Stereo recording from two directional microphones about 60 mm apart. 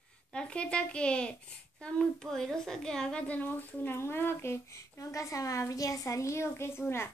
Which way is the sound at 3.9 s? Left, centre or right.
Left.